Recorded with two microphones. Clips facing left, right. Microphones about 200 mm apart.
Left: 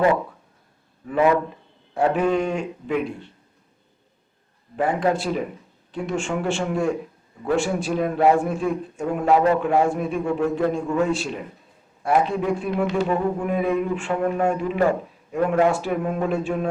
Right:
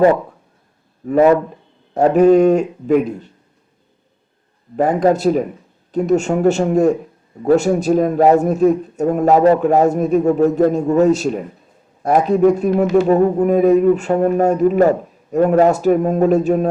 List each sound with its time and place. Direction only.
1.0 s a man's voice: 40° right (ahead or behind)
4.8 s a man's voice: 40° right (ahead or behind)